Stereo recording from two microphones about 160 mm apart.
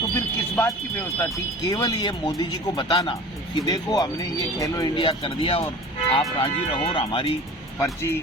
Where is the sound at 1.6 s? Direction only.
20° left (ahead or behind).